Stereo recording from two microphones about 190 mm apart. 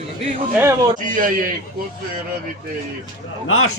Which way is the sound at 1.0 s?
45° right (ahead or behind).